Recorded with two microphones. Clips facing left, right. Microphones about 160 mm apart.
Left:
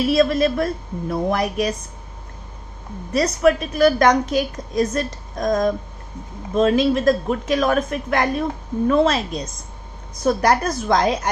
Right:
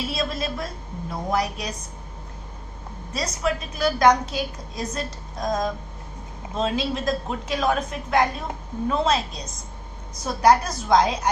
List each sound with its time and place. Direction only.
0.0 s a woman's voice: 60° left (ahead or behind)
3.1 s a woman's voice: 60° left (ahead or behind)